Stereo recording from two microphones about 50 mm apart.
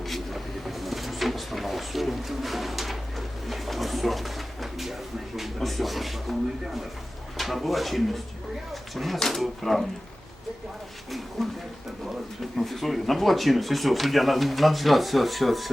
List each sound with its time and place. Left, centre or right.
0.0 s cupboard open or close: centre
5.4 s speech: centre
11.4 s speech: centre